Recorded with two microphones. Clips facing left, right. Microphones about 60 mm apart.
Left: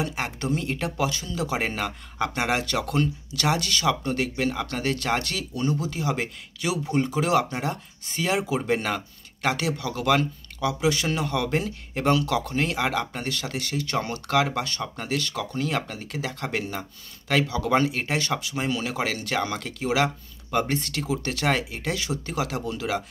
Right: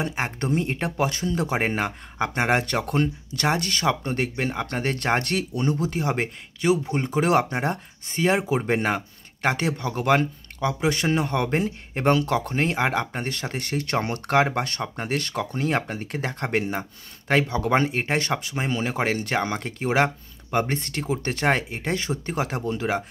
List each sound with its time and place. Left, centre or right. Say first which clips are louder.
0.0 s speech: right 2 dB; right
20.5 s speech: right 1 dB; right